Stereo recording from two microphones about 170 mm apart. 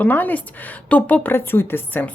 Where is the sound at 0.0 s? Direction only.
10° left (ahead or behind).